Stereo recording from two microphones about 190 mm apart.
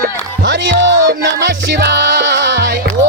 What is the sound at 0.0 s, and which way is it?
Music, 65° right (ahead or behind).